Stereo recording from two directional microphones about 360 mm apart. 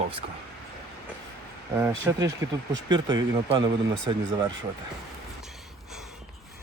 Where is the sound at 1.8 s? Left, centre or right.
Centre.